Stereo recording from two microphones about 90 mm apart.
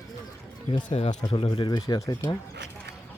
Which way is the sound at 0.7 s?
75° left (ahead or behind).